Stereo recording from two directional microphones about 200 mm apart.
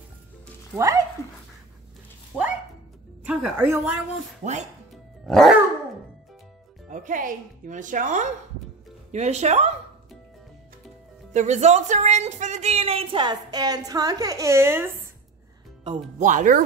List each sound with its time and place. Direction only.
0.7 s a woman's voice: 15° right (ahead or behind)
2.3 s speech: 5° left (ahead or behind)
3.3 s a woman's voice: 10° right (ahead or behind)
5.2 s music: centre (ahead or behind)
6.9 s speech: 40° right (ahead or behind)
11.3 s speech: 35° right (ahead or behind); by 14.9 s 10° right (ahead or behind)
16.2 s speech: 40° right (ahead or behind)